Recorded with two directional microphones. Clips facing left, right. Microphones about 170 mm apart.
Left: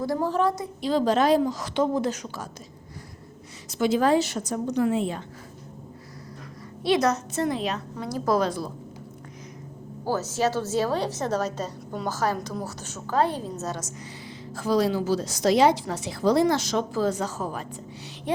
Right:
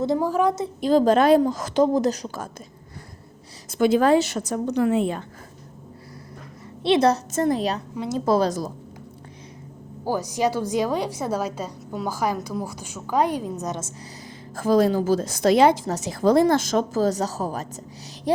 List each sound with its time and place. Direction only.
0.2 s a woman's voice: 10° right (ahead or behind)
0.8 s a woman's voice: 45° right (ahead or behind)
3.7 s a woman's voice: 55° right (ahead or behind)
6.8 s a woman's voice: 25° right (ahead or behind)
7.3 s a woman's voice: 45° right (ahead or behind)
8.0 s a woman's voice: 25° right (ahead or behind)
8.4 s a woman's voice: 40° right (ahead or behind)
10.1 s a woman's voice: 15° right (ahead or behind)
14.3 s a woman's voice: 50° right (ahead or behind)